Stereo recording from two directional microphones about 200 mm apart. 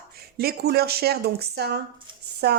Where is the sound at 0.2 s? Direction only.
50° right (ahead or behind).